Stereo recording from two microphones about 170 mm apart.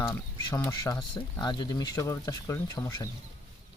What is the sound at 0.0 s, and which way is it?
Speech, 20° left (ahead or behind).